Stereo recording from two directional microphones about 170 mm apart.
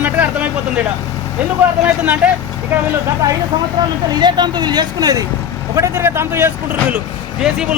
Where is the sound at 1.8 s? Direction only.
10° right (ahead or behind).